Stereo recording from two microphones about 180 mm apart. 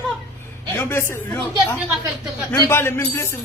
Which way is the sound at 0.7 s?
15° left (ahead or behind).